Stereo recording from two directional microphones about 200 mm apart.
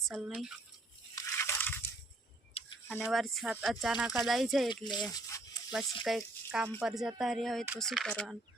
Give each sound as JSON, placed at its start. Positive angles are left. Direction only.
{"t": 0.1, "sound": "speech", "side_deg": -5}
{"t": 1.1, "sound": "a sound", "side_deg": 10}
{"t": 2.9, "sound": "speech", "side_deg": 0}
{"t": 4.7, "sound": "speech", "side_deg": 20}
{"t": 5.7, "sound": "speech", "side_deg": -5}